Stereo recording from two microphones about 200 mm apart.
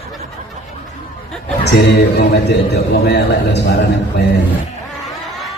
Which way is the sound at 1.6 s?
60° left (ahead or behind).